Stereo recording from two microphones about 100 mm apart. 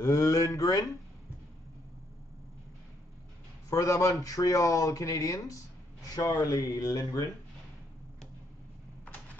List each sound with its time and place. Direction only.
0.0 s speech: 35° left (ahead or behind)
3.7 s speech: 35° left (ahead or behind)